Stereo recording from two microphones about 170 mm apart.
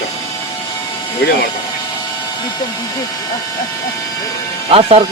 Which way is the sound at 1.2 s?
70° left (ahead or behind).